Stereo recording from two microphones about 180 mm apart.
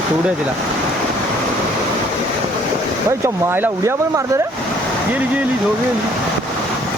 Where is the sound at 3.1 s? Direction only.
15° right (ahead or behind).